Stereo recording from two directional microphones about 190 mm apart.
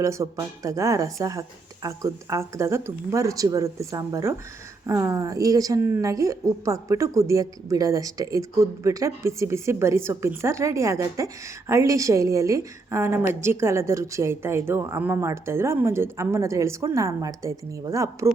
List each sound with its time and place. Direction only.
0.0 s a woman's voice: 15° right (ahead or behind)